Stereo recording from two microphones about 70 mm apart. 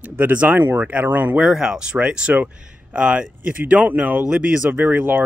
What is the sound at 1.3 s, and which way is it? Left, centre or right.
Speech, centre.